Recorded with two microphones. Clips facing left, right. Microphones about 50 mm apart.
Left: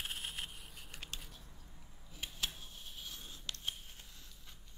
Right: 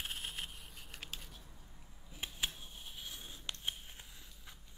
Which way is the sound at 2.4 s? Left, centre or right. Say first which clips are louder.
Even; centre.